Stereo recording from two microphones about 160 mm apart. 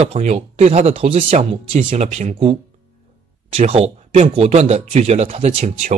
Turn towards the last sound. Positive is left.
turn(degrees=-40)  # may be behind; listen again after turning